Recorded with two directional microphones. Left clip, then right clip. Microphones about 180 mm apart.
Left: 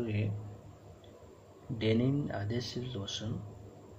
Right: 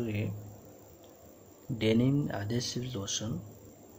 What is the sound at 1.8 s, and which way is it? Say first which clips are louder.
Speech: right 3 dB; 20° right (ahead or behind).